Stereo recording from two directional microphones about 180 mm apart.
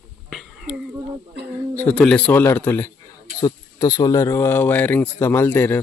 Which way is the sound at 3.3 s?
20° left (ahead or behind).